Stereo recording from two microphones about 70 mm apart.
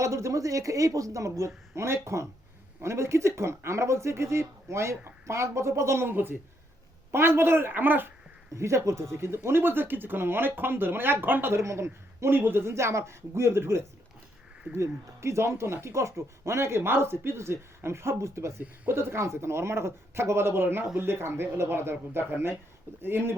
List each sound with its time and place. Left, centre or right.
0.0 s speech: right
8.5 s speech: right
11.5 s speech: right